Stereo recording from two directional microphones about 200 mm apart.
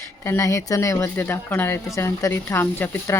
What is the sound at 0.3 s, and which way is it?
Speech, 15° left (ahead or behind).